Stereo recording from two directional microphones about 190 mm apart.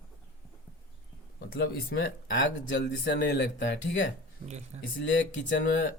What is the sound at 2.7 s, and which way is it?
Speech, 65° left (ahead or behind).